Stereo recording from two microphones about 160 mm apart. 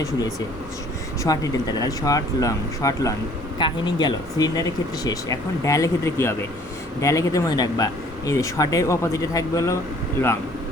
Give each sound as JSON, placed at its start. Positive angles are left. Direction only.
{"t": 0.0, "sound": "speech", "side_deg": 20}